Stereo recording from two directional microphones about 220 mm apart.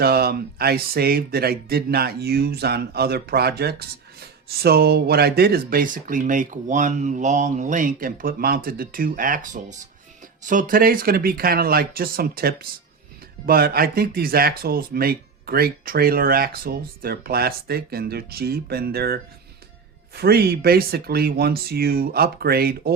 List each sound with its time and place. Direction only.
0.0 s speech: 45° right (ahead or behind)